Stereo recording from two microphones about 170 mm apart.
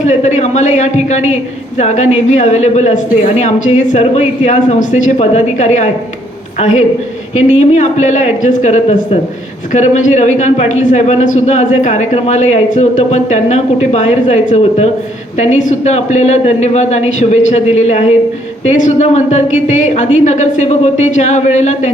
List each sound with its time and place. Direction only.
0.0 s a woman's voice: 40° left (ahead or behind)